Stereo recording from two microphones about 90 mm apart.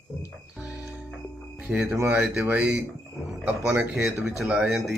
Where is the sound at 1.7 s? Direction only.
5° right (ahead or behind).